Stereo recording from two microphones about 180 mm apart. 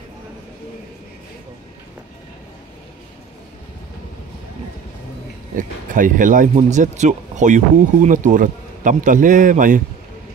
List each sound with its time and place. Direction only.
5.6 s speech: 45° right (ahead or behind)